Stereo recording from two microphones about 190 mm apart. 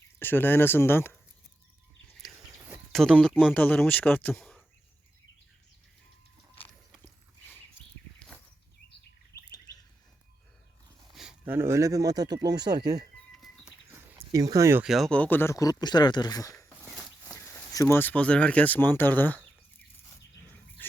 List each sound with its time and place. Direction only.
0.2 s speech: 10° left (ahead or behind)
2.9 s speech: centre (ahead or behind)
11.1 s speech: 5° right (ahead or behind); by 13.1 s 20° right (ahead or behind)
13.3 s livestock: centre (ahead or behind)
13.8 s a sound: 10° right (ahead or behind)
14.8 s speech: centre (ahead or behind)